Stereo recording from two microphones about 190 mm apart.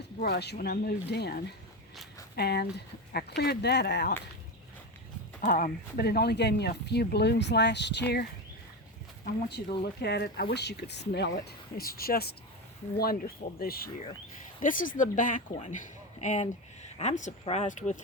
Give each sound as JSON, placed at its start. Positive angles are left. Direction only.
{"t": 0.2, "sound": "speech", "side_deg": 60}
{"t": 5.4, "sound": "speech", "side_deg": 45}
{"t": 9.8, "sound": "speech", "side_deg": 60}